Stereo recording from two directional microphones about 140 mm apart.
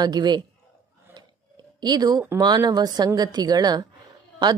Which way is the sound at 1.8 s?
30° right (ahead or behind).